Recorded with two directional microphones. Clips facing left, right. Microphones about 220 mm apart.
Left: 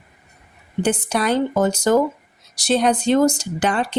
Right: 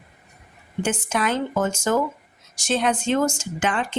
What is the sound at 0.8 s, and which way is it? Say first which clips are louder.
A woman's voice: left 4 dB; 35° left (ahead or behind).